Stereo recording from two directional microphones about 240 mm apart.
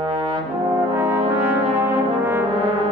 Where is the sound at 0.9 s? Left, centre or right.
Centre.